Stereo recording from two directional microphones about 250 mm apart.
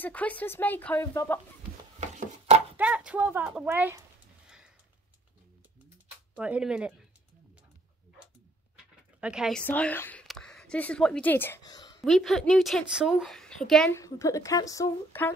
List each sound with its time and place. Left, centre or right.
0.0 s a woman's voice: centre
2.0 s chopping: right
2.8 s speech: centre
4.5 s a sound: centre
6.3 s a woman's voice: centre
9.2 s a woman's voice: centre
12.0 s a woman's voice: centre